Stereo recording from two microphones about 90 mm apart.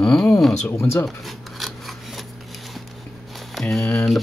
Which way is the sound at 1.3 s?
Centre (ahead or behind).